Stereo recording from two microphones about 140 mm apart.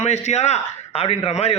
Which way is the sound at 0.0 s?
50° left (ahead or behind).